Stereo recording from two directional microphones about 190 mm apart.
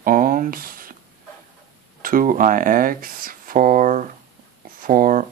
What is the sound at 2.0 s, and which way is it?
Speech, 45° right (ahead or behind).